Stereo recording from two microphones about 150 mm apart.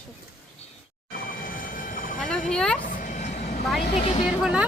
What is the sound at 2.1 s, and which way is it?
Speech, 5° left (ahead or behind).